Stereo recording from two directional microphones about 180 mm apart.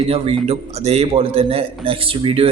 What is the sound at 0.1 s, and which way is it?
A man's voice, 35° right (ahead or behind).